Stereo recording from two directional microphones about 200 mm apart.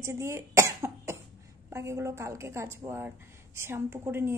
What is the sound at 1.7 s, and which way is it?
A woman's voice, 15° right (ahead or behind).